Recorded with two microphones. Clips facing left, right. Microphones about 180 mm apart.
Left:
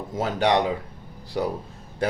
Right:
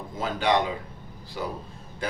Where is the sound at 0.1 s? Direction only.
70° left (ahead or behind).